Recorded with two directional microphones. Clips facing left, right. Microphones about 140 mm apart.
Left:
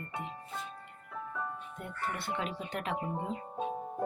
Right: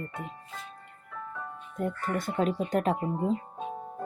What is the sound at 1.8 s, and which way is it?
Speech, 40° right (ahead or behind).